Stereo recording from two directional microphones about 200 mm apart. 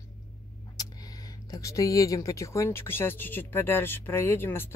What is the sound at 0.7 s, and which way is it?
Speech, 20° left (ahead or behind).